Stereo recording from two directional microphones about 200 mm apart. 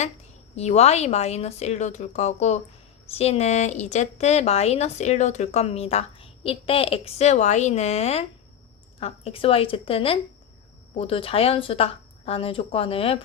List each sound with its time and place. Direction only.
0.5 s a woman's voice: 30° left (ahead or behind)